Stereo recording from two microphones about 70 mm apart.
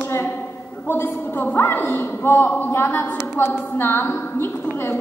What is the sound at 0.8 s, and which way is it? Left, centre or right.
A woman's voice, left.